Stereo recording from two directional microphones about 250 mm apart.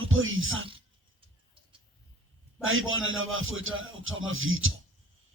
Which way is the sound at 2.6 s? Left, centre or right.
Right.